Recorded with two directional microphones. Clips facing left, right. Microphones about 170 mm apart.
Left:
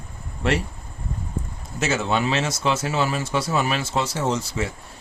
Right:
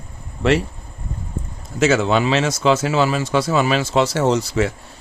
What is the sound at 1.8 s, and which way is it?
Speech, 90° right.